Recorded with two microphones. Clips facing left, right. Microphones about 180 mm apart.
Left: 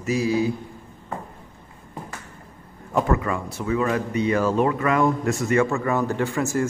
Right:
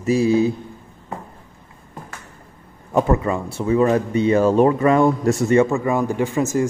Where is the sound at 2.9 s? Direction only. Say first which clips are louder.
Right 4 dB; 25° right (ahead or behind).